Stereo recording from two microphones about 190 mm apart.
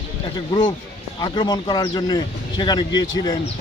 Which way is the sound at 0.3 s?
25° left (ahead or behind).